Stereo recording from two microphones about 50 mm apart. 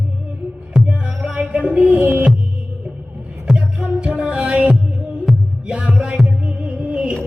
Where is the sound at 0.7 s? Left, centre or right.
Right.